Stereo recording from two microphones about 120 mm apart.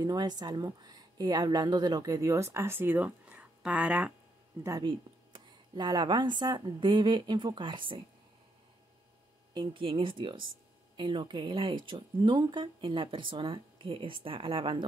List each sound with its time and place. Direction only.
0.0 s a woman's voice: 35° right (ahead or behind); by 4.1 s 10° right (ahead or behind)
4.8 s a woman's voice: 40° right (ahead or behind)
9.5 s speech: 40° right (ahead or behind)